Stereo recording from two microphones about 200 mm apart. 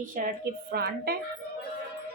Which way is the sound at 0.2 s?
45° right (ahead or behind).